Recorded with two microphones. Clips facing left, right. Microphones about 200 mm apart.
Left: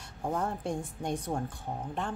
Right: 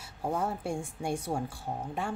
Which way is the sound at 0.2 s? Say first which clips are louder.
Right 1 dB; 5° right (ahead or behind).